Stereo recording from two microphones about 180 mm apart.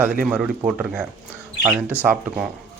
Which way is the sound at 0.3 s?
5° right (ahead or behind).